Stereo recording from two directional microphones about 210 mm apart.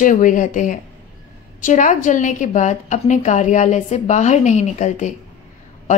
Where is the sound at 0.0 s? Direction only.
40° left (ahead or behind).